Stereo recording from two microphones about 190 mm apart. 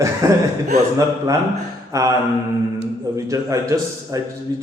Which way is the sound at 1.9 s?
15° right (ahead or behind).